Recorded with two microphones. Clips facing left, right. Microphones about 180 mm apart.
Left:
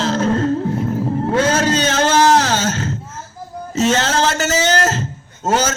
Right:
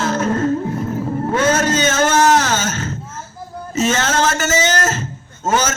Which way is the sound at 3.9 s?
35° left (ahead or behind).